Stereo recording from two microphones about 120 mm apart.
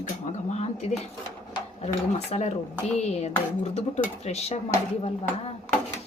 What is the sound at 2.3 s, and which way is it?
A woman's voice, 65° left (ahead or behind).